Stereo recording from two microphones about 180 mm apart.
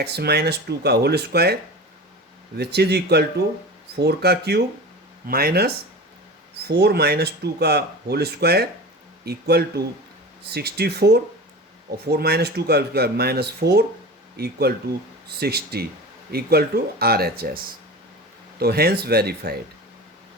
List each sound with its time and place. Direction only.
0.0 s speech: 60° right (ahead or behind)
2.6 s speech: 65° right (ahead or behind)
18.6 s speech: 60° right (ahead or behind)